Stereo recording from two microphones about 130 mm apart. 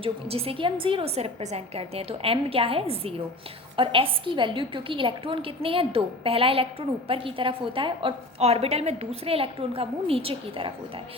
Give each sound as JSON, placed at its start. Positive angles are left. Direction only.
{"t": 0.0, "sound": "a woman's voice", "side_deg": -50}